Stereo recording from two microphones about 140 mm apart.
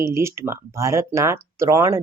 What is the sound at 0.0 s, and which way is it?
Speech, 20° right (ahead or behind).